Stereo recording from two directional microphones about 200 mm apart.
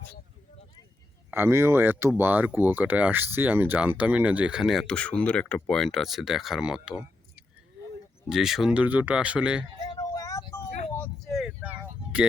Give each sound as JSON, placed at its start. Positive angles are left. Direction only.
{"t": 1.3, "sound": "speech", "side_deg": -10}
{"t": 8.3, "sound": "speech", "side_deg": 0}
{"t": 9.8, "sound": "vehicle", "side_deg": 20}
{"t": 10.9, "sound": "vehicle", "side_deg": 5}